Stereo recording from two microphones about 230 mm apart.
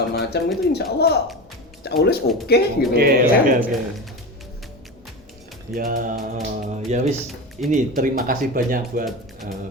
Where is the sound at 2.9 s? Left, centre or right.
Right.